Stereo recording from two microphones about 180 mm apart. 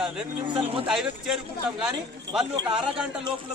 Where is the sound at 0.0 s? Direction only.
5° right (ahead or behind).